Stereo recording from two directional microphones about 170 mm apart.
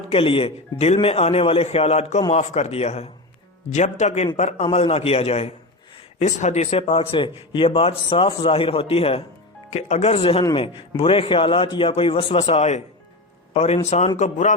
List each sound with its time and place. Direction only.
0.1 s a man's voice: 35° left (ahead or behind)